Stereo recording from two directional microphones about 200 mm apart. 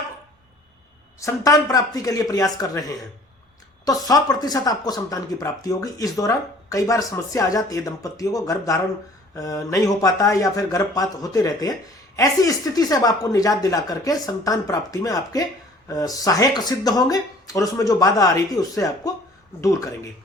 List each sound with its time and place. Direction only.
1.2 s speech: 15° left (ahead or behind)